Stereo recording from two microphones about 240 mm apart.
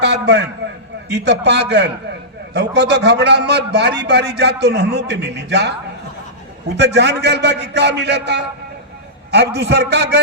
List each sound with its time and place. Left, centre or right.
0.0 s a man's voice: right
6.7 s a man's voice: right